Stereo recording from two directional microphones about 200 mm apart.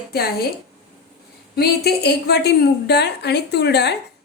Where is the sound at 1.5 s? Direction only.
55° left (ahead or behind).